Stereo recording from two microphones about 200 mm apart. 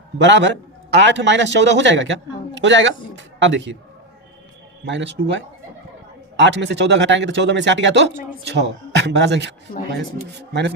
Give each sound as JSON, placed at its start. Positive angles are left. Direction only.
{"t": 0.2, "sound": "a man's voice", "side_deg": -65}
{"t": 4.9, "sound": "a man's voice", "side_deg": -65}